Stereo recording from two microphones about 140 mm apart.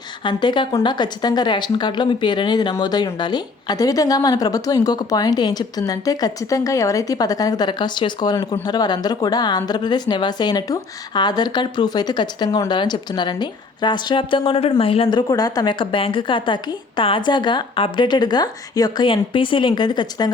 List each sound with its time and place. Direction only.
0.3 s a woman's voice: 35° left (ahead or behind)
15.3 s speech: 25° left (ahead or behind)